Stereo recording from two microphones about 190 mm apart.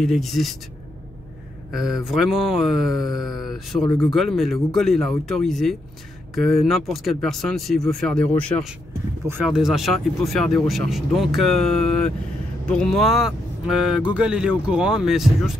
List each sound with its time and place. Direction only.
0.0 s speech: centre (ahead or behind)
1.7 s speech: centre (ahead or behind)
9.3 s speech: 5° right (ahead or behind)